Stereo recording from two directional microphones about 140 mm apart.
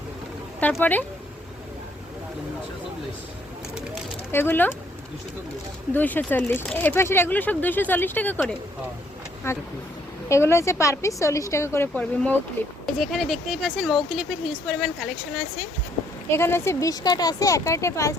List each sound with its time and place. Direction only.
0.6 s speech: 10° left (ahead or behind)
4.3 s speech: 15° left (ahead or behind)
5.9 s a woman's voice: 10° left (ahead or behind)
12.8 s speech: centre (ahead or behind)
16.3 s a woman's voice: 15° left (ahead or behind)